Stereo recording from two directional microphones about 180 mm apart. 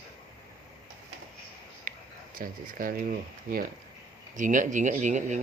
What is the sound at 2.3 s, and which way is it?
Speech, 50° right (ahead or behind).